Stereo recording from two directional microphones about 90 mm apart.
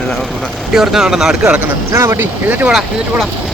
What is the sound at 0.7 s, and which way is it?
Speech, 5° right (ahead or behind).